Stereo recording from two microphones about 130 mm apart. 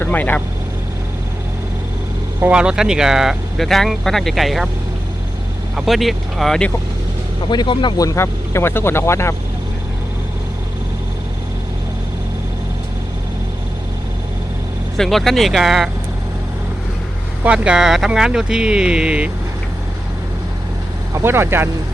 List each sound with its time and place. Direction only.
0.0 s speech: 15° left (ahead or behind)
2.4 s speech: 10° right (ahead or behind)
5.7 s speech: centre (ahead or behind)
7.5 s speech: 35° left (ahead or behind)
14.9 s speech: 5° left (ahead or behind)
17.4 s speech: 10° right (ahead or behind)
21.2 s speech: 20° right (ahead or behind)